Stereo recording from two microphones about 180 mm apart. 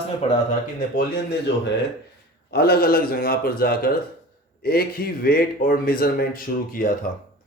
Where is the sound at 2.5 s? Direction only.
60° left (ahead or behind).